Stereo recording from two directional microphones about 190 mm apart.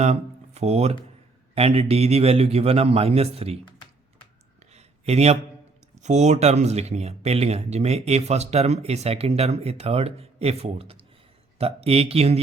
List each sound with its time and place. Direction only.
0.0 s speech: 35° right (ahead or behind)
4.7 s a sound: 35° right (ahead or behind)
6.0 s speech: 35° right (ahead or behind)